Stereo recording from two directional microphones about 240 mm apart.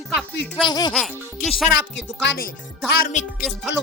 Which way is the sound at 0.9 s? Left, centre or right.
Centre.